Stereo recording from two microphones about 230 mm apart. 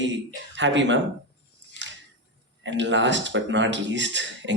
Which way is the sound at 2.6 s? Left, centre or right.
Right.